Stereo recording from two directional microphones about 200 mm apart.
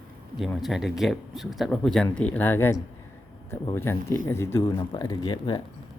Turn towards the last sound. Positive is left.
turn(degrees=20)  # may be behind; listen again after turning